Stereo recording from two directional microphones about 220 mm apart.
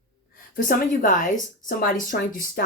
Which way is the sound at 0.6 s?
35° left (ahead or behind).